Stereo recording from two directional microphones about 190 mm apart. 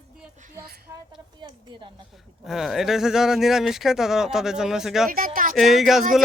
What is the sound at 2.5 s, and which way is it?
Speech, centre (ahead or behind).